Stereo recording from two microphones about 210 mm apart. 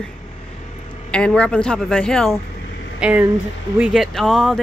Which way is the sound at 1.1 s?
5° left (ahead or behind).